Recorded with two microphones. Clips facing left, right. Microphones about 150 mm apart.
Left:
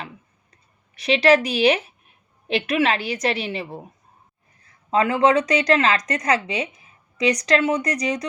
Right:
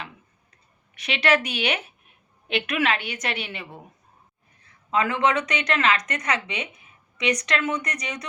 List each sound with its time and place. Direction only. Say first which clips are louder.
0.9 s speech: left 6 dB; 35° left (ahead or behind)
4.9 s speech: left 5 dB; 35° left (ahead or behind)